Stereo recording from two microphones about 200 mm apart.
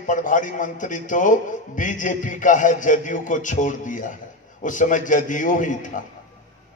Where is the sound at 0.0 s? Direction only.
40° left (ahead or behind).